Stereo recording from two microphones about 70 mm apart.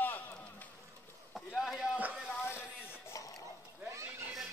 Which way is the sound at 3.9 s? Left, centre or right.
Right.